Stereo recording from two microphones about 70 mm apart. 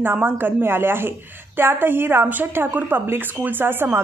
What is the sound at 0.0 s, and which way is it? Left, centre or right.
A woman's voice, right.